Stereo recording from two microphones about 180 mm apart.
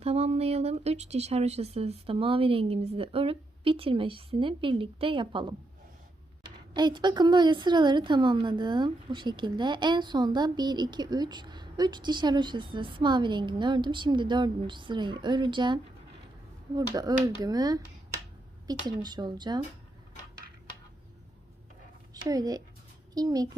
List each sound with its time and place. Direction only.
0.0 s speech: 35° right (ahead or behind)
6.7 s a woman's voice: 25° right (ahead or behind)
22.1 s a child's voice: 20° right (ahead or behind)